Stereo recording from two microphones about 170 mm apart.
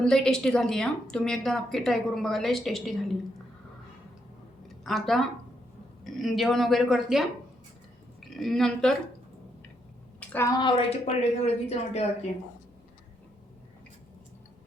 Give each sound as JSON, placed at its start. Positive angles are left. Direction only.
{"t": 0.0, "sound": "a woman's voice", "side_deg": 5}
{"t": 4.8, "sound": "a woman's voice", "side_deg": 0}
{"t": 10.2, "sound": "a woman's voice", "side_deg": 15}